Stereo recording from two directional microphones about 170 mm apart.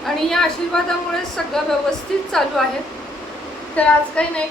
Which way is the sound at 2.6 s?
Centre (ahead or behind).